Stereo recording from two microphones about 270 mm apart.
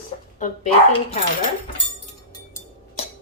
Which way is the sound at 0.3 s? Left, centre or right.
Left.